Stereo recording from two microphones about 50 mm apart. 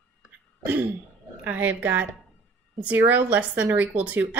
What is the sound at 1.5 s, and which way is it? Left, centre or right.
A woman's voice, right.